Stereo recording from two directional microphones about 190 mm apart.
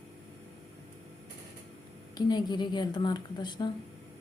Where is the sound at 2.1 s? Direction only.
25° left (ahead or behind).